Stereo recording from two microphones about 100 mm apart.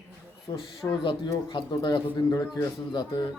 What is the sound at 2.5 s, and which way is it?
Speech, 40° left (ahead or behind).